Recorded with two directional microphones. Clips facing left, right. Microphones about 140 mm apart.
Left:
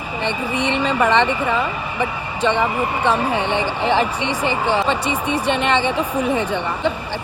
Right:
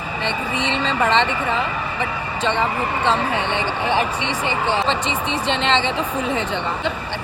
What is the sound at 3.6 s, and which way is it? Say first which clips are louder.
Speech: left 2 dB; 15° right (ahead or behind).